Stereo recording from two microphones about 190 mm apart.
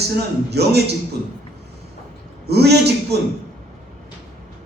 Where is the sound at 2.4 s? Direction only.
60° right (ahead or behind).